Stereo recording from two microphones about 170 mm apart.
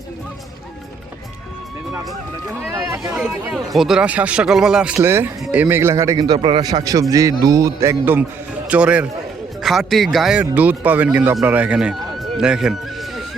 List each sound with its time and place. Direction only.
2.6 s run: 20° right (ahead or behind)
3.5 s a man's voice: centre (ahead or behind)